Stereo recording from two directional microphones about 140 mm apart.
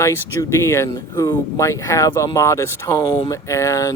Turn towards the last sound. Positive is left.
turn(degrees=25)  # may be behind; listen again after turning